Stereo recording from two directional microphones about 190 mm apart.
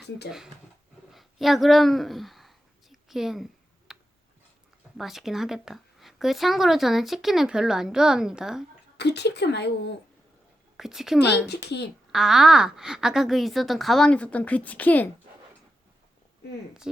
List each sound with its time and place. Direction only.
0.3 s a woman's voice: 5° right (ahead or behind)
1.1 s a sound: centre (ahead or behind)
4.9 s a woman's voice: centre (ahead or behind)
9.0 s a woman's voice: 60° left (ahead or behind)
10.8 s a woman's voice: centre (ahead or behind)
11.4 s a woman's voice: 60° left (ahead or behind)
12.1 s a woman's voice: centre (ahead or behind)
16.9 s a woman's voice: 5° right (ahead or behind)